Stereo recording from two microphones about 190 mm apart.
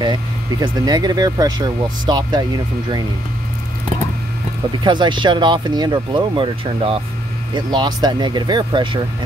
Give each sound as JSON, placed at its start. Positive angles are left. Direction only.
{"t": 0.0, "sound": "speech", "side_deg": -20}
{"t": 4.8, "sound": "speech", "side_deg": -25}